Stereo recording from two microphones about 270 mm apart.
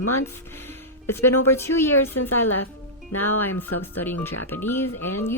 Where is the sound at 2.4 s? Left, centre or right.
Left.